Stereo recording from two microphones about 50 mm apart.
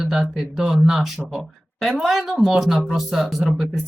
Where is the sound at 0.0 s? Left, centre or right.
Centre.